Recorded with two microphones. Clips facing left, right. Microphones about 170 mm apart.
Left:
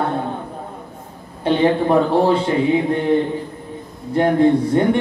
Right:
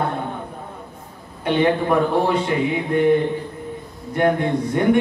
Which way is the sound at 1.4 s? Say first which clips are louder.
Left 2 dB; 30° left (ahead or behind).